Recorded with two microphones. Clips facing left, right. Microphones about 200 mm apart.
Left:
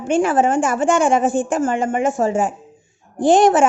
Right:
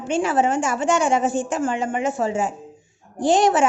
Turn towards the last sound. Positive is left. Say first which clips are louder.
# left 4 dB
turn(degrees=50)  # may be behind; listen again after turning